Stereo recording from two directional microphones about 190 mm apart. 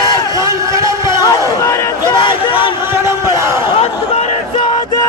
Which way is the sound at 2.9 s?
15° right (ahead or behind).